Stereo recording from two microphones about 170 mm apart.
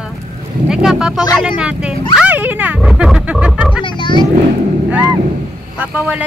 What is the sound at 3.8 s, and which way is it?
Speech, 30° left (ahead or behind).